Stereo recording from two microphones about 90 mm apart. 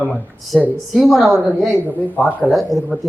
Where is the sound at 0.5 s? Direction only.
Centre (ahead or behind).